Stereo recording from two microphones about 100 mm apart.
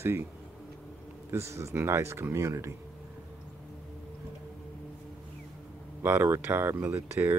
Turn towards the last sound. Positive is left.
turn(degrees=-20)  # may be behind; listen again after turning